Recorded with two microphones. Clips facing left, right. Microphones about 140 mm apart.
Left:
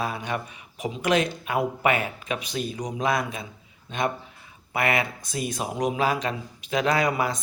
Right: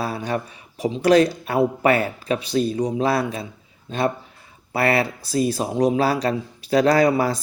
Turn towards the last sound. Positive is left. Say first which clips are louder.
# right 6 dB
turn(degrees=-35)  # may be behind; listen again after turning